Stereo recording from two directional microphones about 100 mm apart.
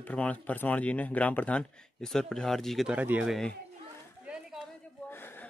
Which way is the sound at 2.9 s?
15° right (ahead or behind).